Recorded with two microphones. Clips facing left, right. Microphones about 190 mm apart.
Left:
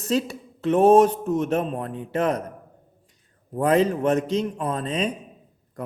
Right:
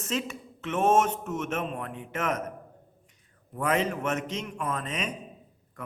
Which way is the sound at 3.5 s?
35° left (ahead or behind).